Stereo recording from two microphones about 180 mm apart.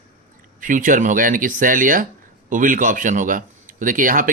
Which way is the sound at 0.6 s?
50° right (ahead or behind).